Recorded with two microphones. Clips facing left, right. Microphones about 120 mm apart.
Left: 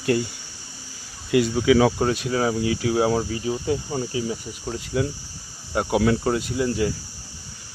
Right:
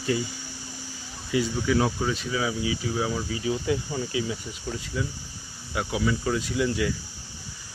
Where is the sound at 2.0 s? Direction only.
60° left (ahead or behind).